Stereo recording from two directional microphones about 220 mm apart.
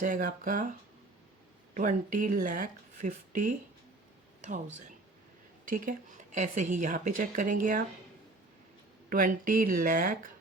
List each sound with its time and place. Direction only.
0.0 s speech: 35° right (ahead or behind)
1.7 s speech: 35° right (ahead or behind)
4.4 s a sound: 35° right (ahead or behind)
5.6 s speech: 35° right (ahead or behind)
9.0 s speech: 40° right (ahead or behind)